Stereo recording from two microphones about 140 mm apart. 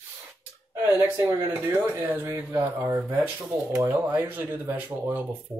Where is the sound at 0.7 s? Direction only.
20° right (ahead or behind).